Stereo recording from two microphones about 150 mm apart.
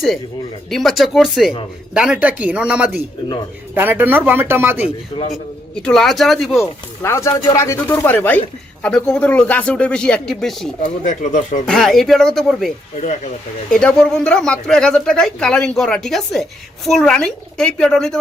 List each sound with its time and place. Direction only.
0.7 s speech: centre (ahead or behind)
5.8 s speech: 5° left (ahead or behind)
7.0 s speech: 20° left (ahead or behind); by 10.7 s centre (ahead or behind)
10.8 s speech: 55° left (ahead or behind)
11.6 s speech: centre (ahead or behind)
13.0 s speech: 50° left (ahead or behind)
13.7 s speech: 5° left (ahead or behind)